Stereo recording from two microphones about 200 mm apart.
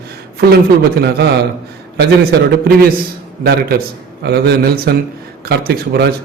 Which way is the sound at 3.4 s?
50° right (ahead or behind).